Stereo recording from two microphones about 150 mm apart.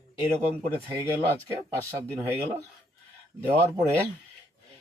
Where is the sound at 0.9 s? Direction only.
10° right (ahead or behind).